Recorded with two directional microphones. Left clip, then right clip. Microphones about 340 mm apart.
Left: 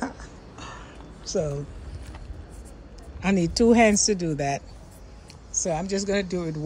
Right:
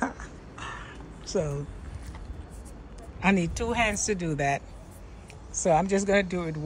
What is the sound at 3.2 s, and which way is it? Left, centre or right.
A man's voice, centre.